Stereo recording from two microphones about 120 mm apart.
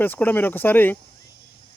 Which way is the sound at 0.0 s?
15° left (ahead or behind).